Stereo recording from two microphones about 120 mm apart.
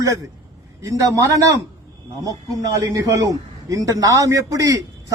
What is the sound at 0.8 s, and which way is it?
A man's voice, 25° right (ahead or behind).